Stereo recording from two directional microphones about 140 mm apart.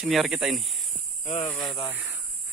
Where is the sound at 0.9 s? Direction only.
50° left (ahead or behind).